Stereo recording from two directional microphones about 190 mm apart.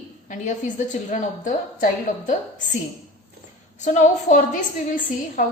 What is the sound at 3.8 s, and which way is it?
Speech, 40° left (ahead or behind).